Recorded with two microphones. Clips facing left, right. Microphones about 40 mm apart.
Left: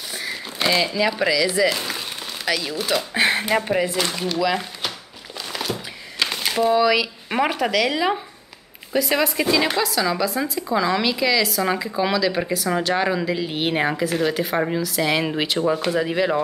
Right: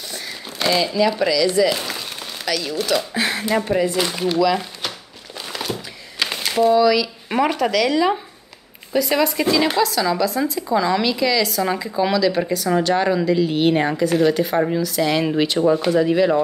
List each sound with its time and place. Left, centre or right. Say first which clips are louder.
0.1 s speech: left 2 dB; centre
2.0 s crumpling: even; centre
3.2 s speech: left 1 dB; left
3.9 s speech: right 3 dB; centre
4.4 s speech: right 3 dB; centre
5.5 s a sound: even; centre
6.7 s speech: right 2 dB; centre
7.2 s speech: right 3 dB; centre